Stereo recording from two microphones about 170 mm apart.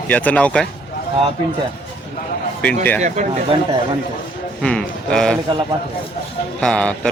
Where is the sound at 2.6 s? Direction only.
10° left (ahead or behind).